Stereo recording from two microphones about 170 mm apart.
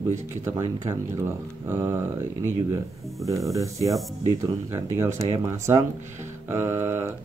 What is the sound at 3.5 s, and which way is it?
Speech, 20° right (ahead or behind).